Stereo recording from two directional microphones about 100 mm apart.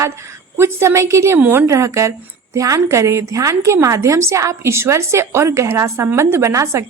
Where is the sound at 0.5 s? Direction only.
25° right (ahead or behind).